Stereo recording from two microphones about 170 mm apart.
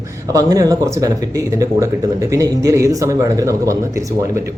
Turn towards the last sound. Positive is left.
turn(degrees=-20)  # may be behind; listen again after turning